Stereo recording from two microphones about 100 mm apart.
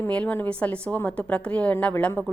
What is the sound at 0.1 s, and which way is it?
A woman's voice, 15° left (ahead or behind).